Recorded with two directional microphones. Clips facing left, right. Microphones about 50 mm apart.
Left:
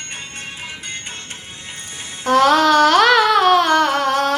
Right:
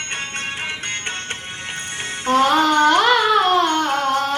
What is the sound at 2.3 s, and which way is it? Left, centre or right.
Music, left.